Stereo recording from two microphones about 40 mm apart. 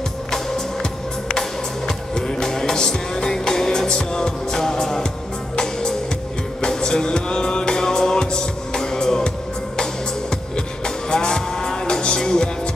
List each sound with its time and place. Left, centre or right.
0.3 s music: centre
1.9 s music: centre
10.3 s music: centre